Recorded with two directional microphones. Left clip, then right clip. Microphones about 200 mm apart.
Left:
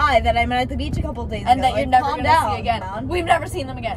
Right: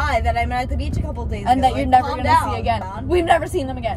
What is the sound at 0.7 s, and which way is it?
A woman's voice, 10° right (ahead or behind).